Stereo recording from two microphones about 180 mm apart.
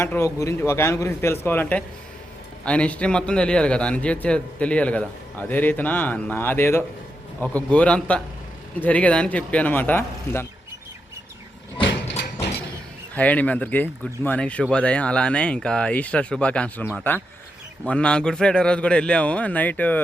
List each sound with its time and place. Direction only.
0.0 s a man's voice: 15° left (ahead or behind)
11.8 s a sound: 75° left (ahead or behind)
13.1 s a man's voice: 10° left (ahead or behind)